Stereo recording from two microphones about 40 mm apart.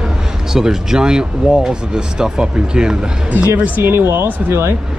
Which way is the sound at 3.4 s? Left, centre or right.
Right.